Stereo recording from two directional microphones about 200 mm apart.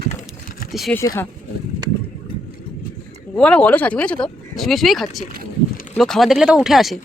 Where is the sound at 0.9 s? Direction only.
15° left (ahead or behind).